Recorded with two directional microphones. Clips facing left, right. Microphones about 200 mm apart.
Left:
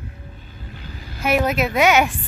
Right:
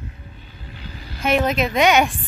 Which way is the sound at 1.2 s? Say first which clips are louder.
Even; 10° left (ahead or behind).